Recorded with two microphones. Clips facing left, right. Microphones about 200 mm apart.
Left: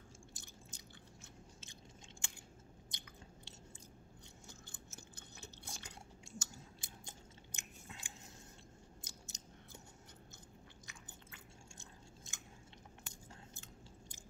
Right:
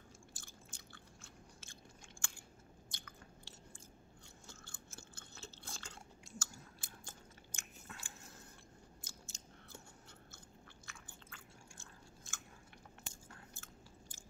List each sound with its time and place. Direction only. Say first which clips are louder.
0.3 s chewing: left 1 dB; 20° left (ahead or behind)
2.2 s biting: even; 20° left (ahead or behind)
9.0 s chewing: left 1 dB; 20° left (ahead or behind)
10.9 s chewing: even; 20° left (ahead or behind)